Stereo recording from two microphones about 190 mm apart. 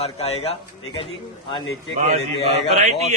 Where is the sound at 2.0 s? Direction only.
35° right (ahead or behind).